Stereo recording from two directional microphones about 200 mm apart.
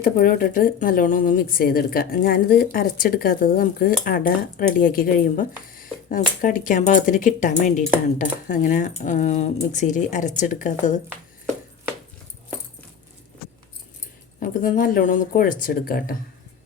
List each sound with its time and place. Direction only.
0.0 s a woman's voice: 45° left (ahead or behind)
14.3 s a woman's voice: 45° left (ahead or behind)